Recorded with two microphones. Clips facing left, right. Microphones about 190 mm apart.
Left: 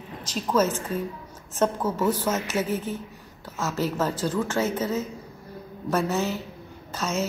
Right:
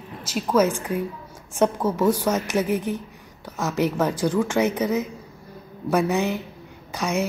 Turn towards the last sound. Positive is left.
turn(degrees=-15)  # may be behind; listen again after turning